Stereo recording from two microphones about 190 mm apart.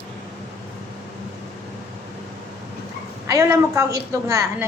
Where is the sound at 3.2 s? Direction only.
15° right (ahead or behind).